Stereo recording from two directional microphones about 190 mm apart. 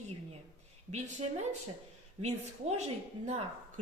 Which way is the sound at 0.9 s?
35° right (ahead or behind).